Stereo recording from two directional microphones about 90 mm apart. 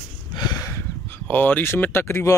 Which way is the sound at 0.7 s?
20° left (ahead or behind).